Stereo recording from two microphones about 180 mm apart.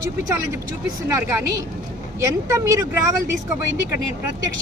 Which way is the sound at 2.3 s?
15° right (ahead or behind).